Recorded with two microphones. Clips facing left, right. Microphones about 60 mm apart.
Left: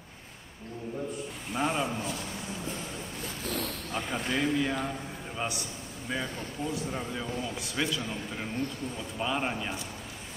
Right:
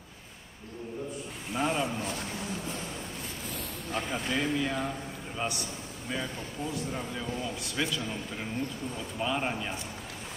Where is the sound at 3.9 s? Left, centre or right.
Centre.